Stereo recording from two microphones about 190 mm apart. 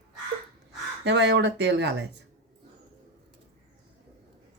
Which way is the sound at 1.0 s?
70° right (ahead or behind).